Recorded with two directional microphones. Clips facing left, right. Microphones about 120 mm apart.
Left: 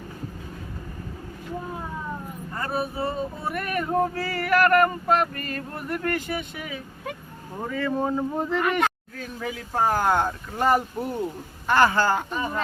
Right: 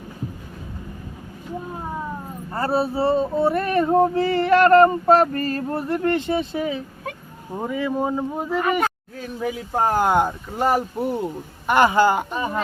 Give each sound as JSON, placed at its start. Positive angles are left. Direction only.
{"t": 2.5, "sound": "a sound", "side_deg": -35}
{"t": 7.5, "sound": "speech", "side_deg": -15}
{"t": 11.6, "sound": "speech", "side_deg": -15}